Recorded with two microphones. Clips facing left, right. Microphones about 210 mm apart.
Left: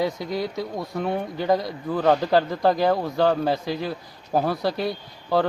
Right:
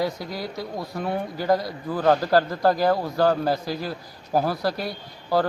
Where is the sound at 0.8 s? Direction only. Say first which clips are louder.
Left 1 dB; 5° right (ahead or behind).